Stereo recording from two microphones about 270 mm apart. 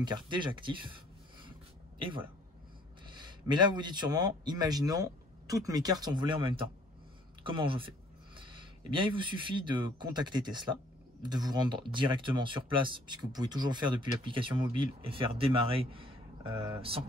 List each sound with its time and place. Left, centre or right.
0.0 s speech: centre
2.0 s speech: centre
9.0 s speech: centre